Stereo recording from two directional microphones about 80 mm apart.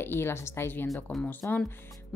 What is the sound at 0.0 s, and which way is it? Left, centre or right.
Speech, left.